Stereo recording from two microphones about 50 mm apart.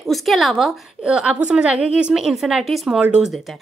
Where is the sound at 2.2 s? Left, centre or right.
Centre.